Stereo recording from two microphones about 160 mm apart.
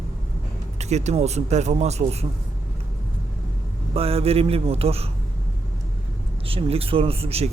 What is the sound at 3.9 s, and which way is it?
Speech, 35° right (ahead or behind).